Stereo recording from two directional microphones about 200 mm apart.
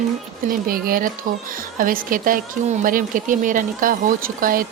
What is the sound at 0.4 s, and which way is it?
A woman's voice, 45° right (ahead or behind).